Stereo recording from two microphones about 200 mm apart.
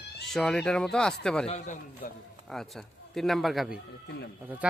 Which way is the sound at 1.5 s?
35° left (ahead or behind).